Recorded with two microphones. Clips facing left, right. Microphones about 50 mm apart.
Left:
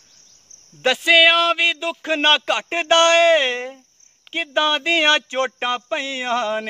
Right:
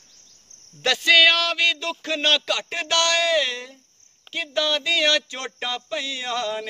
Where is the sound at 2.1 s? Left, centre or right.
Left.